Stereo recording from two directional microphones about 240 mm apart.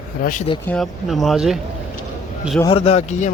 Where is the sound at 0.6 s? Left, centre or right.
Centre.